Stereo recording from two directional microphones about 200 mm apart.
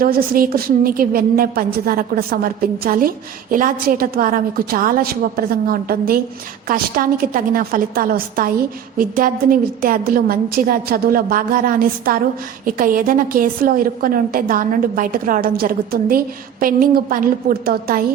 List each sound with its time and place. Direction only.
0.0 s a woman's voice: 45° right (ahead or behind)